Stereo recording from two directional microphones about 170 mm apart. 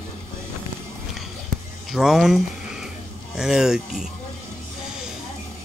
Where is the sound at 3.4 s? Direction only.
5° right (ahead or behind).